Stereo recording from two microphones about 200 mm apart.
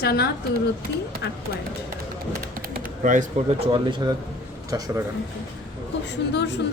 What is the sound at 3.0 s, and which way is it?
Speech, 40° right (ahead or behind).